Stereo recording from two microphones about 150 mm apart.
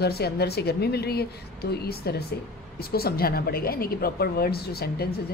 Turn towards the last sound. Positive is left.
turn(degrees=90)